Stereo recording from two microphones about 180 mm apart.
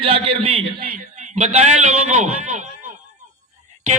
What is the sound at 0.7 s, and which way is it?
A man's voice, 55° right (ahead or behind).